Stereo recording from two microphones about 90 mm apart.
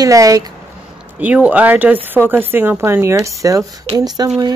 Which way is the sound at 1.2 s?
15° right (ahead or behind).